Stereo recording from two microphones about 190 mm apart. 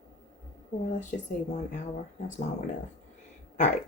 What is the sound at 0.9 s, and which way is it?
Speech, 40° left (ahead or behind).